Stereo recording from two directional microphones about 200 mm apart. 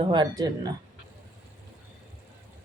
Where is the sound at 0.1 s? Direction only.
20° right (ahead or behind).